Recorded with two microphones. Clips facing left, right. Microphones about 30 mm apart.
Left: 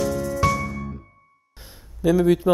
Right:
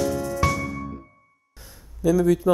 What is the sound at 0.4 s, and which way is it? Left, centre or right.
Music, centre.